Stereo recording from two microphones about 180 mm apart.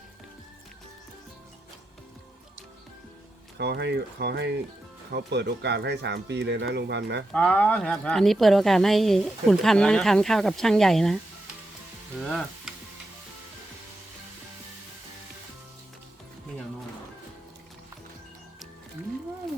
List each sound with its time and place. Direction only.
3.6 s speech: 70° right (ahead or behind)
7.3 s a woman's voice: 5° left (ahead or behind)
12.2 s sizzle: centre (ahead or behind)